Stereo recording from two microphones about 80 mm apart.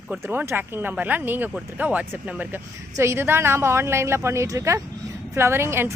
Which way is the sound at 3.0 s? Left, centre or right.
Right.